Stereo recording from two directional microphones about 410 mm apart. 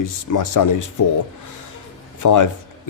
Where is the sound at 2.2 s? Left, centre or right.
Left.